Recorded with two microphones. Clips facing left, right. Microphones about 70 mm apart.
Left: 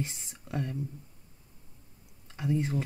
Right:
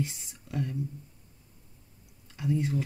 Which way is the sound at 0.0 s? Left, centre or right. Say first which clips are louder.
Right 3 dB; left.